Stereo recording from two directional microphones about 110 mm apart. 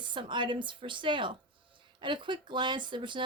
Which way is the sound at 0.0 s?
45° right (ahead or behind).